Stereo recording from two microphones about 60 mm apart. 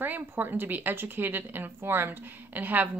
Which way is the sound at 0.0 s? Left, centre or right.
Right.